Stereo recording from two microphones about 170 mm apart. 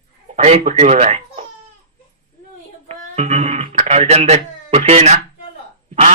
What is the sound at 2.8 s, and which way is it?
Speech, 40° right (ahead or behind).